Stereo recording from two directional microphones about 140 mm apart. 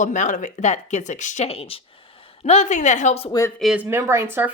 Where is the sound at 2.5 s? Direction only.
55° left (ahead or behind).